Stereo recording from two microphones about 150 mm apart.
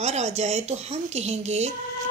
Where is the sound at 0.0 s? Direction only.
50° right (ahead or behind).